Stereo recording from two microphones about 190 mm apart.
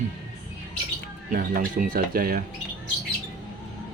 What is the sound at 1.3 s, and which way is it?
Speech, 45° right (ahead or behind).